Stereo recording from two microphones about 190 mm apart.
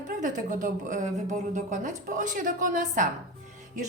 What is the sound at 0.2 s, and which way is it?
Speech, 45° right (ahead or behind).